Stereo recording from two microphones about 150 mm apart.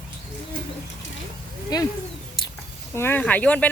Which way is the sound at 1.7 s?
25° left (ahead or behind).